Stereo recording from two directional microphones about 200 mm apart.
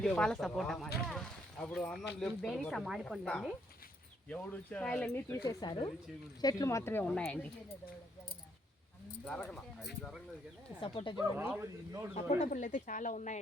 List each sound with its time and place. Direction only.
0.0 s speech: 5° left (ahead or behind)
9.2 s speech: 5° left (ahead or behind)
10.8 s speech: 25° left (ahead or behind)
11.3 s speech: 10° right (ahead or behind)
12.3 s speech: 35° left (ahead or behind)